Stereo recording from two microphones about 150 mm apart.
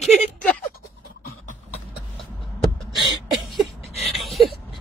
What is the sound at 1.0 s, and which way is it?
Beatboxing, 75° left (ahead or behind).